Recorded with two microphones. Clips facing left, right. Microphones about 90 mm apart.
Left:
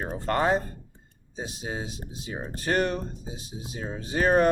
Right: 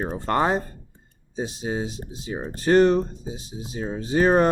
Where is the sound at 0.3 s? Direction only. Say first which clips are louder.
Right 2 dB; 30° right (ahead or behind).